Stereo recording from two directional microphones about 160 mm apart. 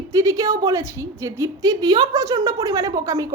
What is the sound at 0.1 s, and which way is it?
A woman's voice, 20° right (ahead or behind).